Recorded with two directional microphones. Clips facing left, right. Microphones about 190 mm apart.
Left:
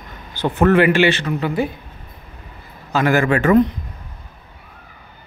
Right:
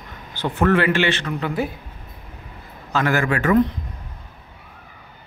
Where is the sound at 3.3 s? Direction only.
25° left (ahead or behind).